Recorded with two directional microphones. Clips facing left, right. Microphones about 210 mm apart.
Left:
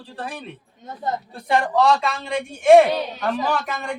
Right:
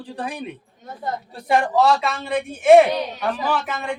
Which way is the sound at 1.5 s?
5° right (ahead or behind).